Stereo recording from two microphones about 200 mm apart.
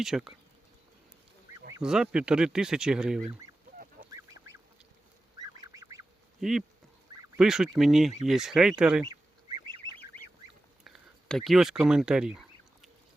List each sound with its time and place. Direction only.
0.0 s speech: centre (ahead or behind)
1.8 s speech: 5° right (ahead or behind)
4.1 s goose: 15° right (ahead or behind)
6.4 s speech: centre (ahead or behind)
9.0 s duck: 20° right (ahead or behind)
10.8 s a sound: centre (ahead or behind)